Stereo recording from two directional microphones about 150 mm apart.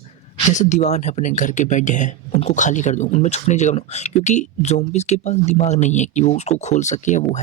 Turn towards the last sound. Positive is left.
turn(degrees=55)  # may be behind; listen again after turning